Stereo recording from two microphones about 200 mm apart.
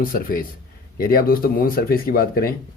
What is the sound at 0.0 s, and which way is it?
Speech, 45° left (ahead or behind).